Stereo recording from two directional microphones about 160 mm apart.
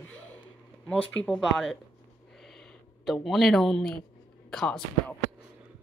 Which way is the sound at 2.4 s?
Centre (ahead or behind).